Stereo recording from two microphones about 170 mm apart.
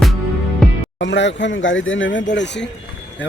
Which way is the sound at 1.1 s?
90° left.